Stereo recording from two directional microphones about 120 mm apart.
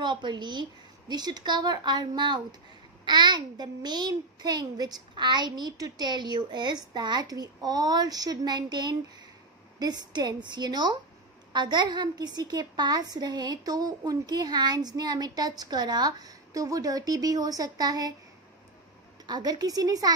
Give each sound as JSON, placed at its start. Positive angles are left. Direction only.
{"t": 0.0, "sound": "a woman's voice", "side_deg": -40}
{"t": 19.2, "sound": "a woman's voice", "side_deg": -35}